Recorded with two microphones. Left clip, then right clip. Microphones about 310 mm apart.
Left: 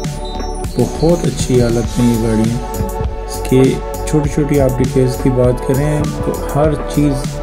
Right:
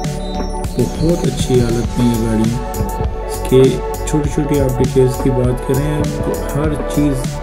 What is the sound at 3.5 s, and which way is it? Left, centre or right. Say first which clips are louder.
Speech: right 2 dB; left.